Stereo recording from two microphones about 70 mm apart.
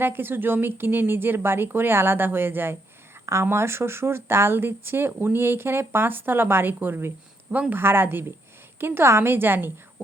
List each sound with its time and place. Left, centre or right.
0.0 s speech: right